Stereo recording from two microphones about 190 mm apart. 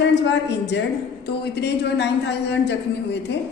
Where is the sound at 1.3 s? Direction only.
60° left (ahead or behind).